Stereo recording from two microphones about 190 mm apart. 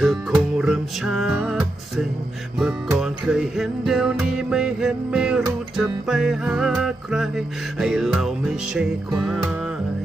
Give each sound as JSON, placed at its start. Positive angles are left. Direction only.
{"t": 0.0, "sound": "music", "side_deg": 0}